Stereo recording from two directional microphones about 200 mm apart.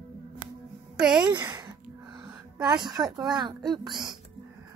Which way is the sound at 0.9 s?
5° right (ahead or behind).